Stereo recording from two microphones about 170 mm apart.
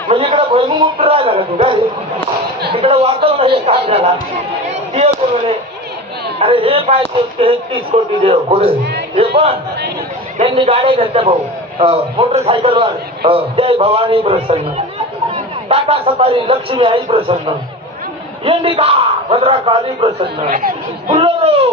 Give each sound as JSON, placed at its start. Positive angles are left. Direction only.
{"t": 0.1, "sound": "speech", "side_deg": -35}
{"t": 4.6, "sound": "a sound", "side_deg": -40}
{"t": 6.4, "sound": "speech", "side_deg": -30}
{"t": 10.4, "sound": "a man's voice", "side_deg": -35}
{"t": 18.4, "sound": "speech", "side_deg": -30}
{"t": 20.4, "sound": "speech", "side_deg": -55}
{"t": 21.2, "sound": "speech", "side_deg": -35}